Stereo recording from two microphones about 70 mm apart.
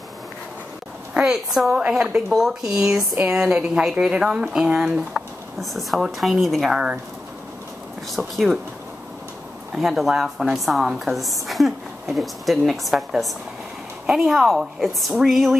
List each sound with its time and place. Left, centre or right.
1.1 s a woman's voice: centre
8.2 s a woman's voice: centre
9.8 s a woman's voice: centre